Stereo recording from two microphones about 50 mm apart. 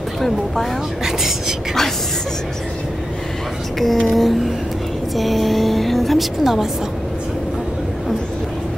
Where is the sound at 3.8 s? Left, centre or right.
Centre.